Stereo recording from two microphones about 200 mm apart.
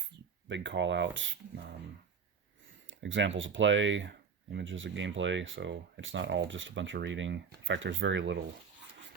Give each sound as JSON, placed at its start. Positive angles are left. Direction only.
{"t": 0.0, "sound": "speech", "side_deg": -65}
{"t": 3.0, "sound": "speech", "side_deg": -70}